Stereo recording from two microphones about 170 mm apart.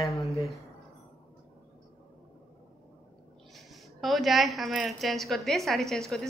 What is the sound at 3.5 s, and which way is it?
A woman's voice, centre (ahead or behind).